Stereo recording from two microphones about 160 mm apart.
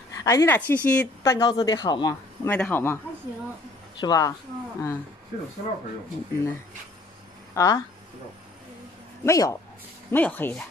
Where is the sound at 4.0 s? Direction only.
20° left (ahead or behind).